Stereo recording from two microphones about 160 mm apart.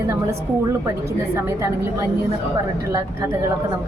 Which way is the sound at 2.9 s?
15° right (ahead or behind).